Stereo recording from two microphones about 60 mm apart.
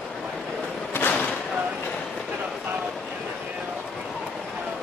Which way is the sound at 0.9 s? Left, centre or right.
Left.